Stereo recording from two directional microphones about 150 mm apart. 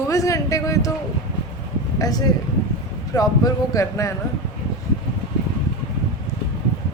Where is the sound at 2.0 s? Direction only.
25° left (ahead or behind).